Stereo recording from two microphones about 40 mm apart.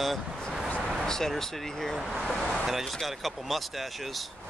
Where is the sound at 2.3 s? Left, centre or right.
Centre.